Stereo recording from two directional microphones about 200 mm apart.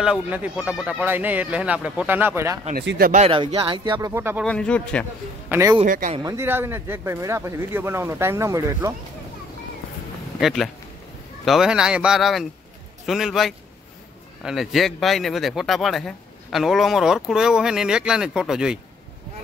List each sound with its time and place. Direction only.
0.0 s speech: 5° right (ahead or behind)
2.7 s speech: 55° right (ahead or behind)
3.1 s speech: 30° right (ahead or behind); by 4.5 s 10° right (ahead or behind)
4.5 s speech: 5° left (ahead or behind)
5.5 s speech: 15° right (ahead or behind)
5.9 s speech: 40° right (ahead or behind)
6.1 s speech: 15° right (ahead or behind)
10.4 s speech: centre (ahead or behind)